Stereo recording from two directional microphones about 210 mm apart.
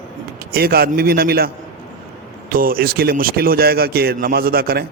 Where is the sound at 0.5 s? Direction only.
45° right (ahead or behind).